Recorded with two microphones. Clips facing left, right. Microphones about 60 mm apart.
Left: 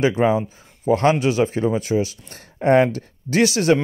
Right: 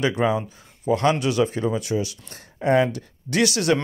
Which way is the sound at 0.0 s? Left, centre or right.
Left.